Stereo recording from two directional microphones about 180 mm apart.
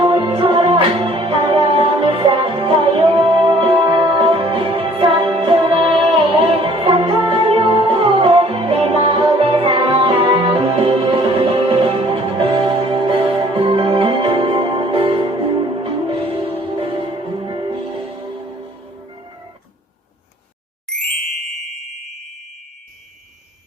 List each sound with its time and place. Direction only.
0.0 s music: 30° right (ahead or behind)
20.9 s ding: 5° left (ahead or behind)